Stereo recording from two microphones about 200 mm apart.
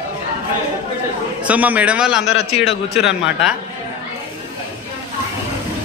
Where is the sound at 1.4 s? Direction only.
5° right (ahead or behind).